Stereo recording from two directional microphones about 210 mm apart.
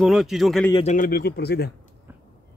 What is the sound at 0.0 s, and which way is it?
Speech, centre (ahead or behind).